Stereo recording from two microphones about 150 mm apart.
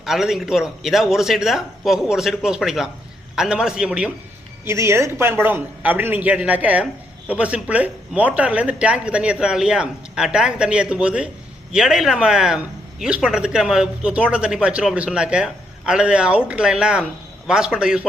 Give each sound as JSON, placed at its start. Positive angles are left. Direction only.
{"t": 0.0, "sound": "speech", "side_deg": 0}
{"t": 4.6, "sound": "speech", "side_deg": -20}